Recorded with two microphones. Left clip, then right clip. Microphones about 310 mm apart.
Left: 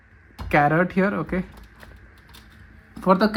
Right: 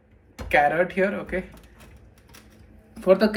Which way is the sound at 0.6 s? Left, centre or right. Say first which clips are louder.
Left 2 dB; centre.